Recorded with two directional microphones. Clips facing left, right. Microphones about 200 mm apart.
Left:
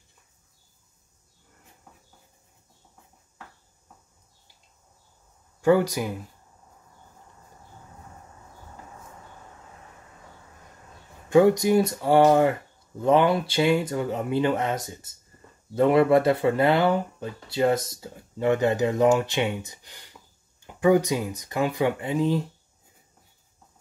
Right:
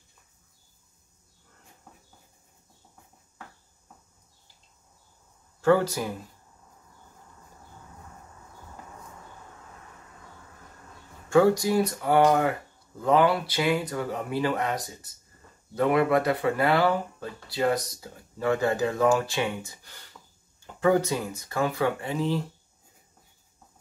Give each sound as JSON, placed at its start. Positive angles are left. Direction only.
{"t": 5.6, "sound": "speech", "side_deg": 15}
{"t": 11.2, "sound": "speech", "side_deg": 20}